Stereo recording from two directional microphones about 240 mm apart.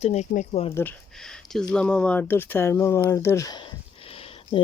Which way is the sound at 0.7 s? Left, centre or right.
Centre.